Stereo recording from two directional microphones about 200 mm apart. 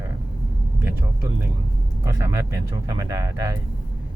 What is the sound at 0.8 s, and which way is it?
Speech, 10° right (ahead or behind).